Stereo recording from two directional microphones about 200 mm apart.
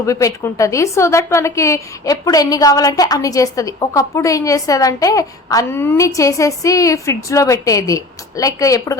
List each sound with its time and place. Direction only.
0.0 s a woman's voice: 15° left (ahead or behind)